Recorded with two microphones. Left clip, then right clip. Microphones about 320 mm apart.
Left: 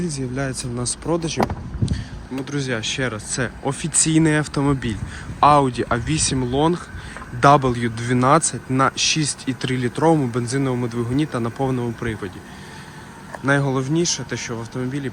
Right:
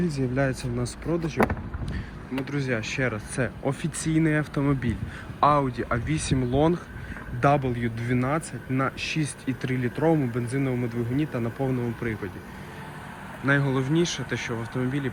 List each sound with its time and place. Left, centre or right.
0.0 s speech: centre
2.4 s a man's voice: centre
13.4 s speech: centre